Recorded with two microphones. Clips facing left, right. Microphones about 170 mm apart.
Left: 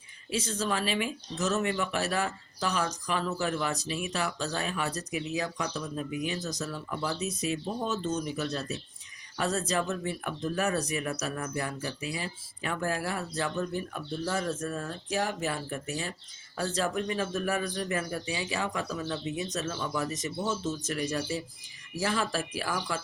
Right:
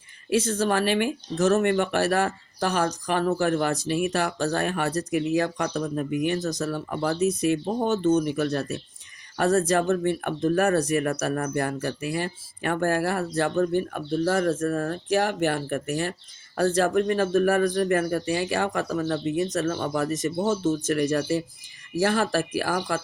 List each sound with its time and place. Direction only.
0.3 s speech: 55° right (ahead or behind)
22.7 s speech: 50° right (ahead or behind)